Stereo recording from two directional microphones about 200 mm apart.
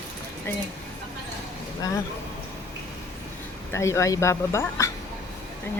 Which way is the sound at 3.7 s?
15° left (ahead or behind).